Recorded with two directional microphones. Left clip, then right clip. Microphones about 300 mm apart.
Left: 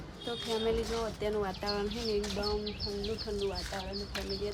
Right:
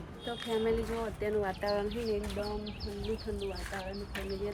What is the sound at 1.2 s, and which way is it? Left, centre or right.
Speech, centre.